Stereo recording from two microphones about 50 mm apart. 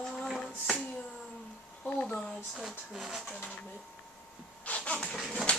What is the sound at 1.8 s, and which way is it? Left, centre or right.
Speech, left.